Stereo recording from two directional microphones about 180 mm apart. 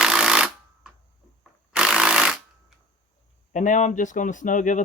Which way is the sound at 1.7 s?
5° right (ahead or behind).